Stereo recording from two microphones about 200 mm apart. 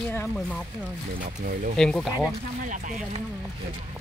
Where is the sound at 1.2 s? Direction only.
45° right (ahead or behind).